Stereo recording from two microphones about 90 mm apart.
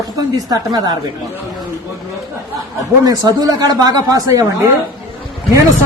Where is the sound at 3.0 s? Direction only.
45° right (ahead or behind).